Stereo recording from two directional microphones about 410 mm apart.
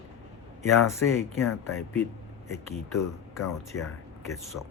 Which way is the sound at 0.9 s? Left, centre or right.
Centre.